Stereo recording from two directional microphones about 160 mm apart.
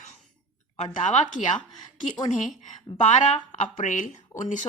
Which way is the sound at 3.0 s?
50° left (ahead or behind).